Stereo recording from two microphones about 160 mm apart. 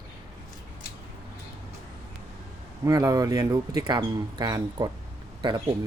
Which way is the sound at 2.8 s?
20° right (ahead or behind).